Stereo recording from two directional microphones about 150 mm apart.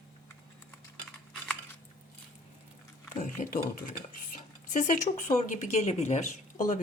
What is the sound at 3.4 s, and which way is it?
Speech, 65° left (ahead or behind).